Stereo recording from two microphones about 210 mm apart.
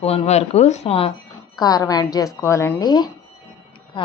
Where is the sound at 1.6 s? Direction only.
15° left (ahead or behind).